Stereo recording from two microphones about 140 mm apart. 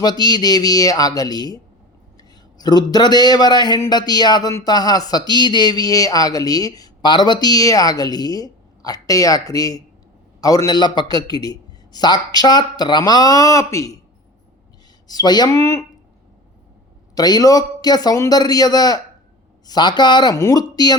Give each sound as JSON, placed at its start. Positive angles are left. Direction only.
{"t": 0.0, "sound": "a man's voice", "side_deg": 30}
{"t": 15.0, "sound": "a man's voice", "side_deg": 30}
{"t": 17.2, "sound": "a man's voice", "side_deg": 30}